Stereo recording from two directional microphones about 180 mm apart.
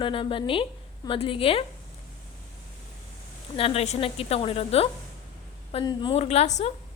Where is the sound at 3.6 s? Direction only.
35° left (ahead or behind).